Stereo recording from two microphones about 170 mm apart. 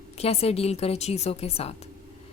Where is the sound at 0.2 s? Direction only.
35° left (ahead or behind).